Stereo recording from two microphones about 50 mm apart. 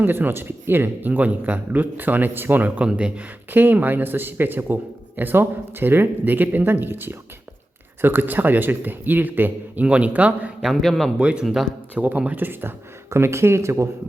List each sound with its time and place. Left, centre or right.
0.0 s speech: right
1.1 s a man's voice: right
3.5 s a man's voice: right
9.8 s speech: right
10.8 s a man's voice: centre
11.2 s speech: right
11.4 s a man's voice: centre
11.9 s a man's voice: right
13.1 s speech: right